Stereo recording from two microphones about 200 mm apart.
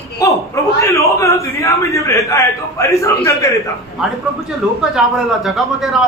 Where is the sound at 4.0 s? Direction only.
Centre (ahead or behind).